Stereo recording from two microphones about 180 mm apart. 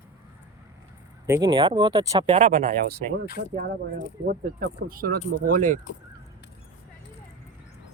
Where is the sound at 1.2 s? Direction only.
15° right (ahead or behind).